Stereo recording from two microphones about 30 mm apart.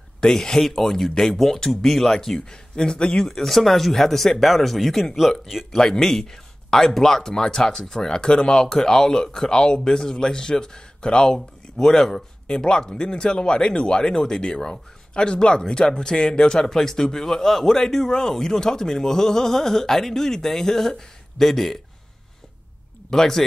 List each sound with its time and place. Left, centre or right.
0.2 s speech: centre
2.5 s speech: left
3.2 s speech: centre
5.8 s a man's voice: centre
7.7 s speech: centre
8.2 s speech: left
8.6 s speech: centre
11.8 s speech: centre
12.1 s speech: left; by 21.7 s centre
23.0 s speech: centre